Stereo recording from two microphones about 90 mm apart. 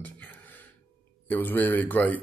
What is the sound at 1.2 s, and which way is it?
Speech, 20° left (ahead or behind).